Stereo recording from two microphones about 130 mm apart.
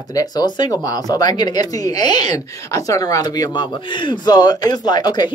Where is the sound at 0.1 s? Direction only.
30° left (ahead or behind).